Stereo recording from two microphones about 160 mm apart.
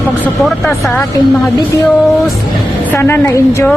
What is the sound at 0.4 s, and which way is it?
Speech, 5° left (ahead or behind).